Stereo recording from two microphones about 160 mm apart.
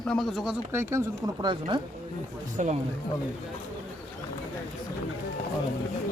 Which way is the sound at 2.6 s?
50° right (ahead or behind).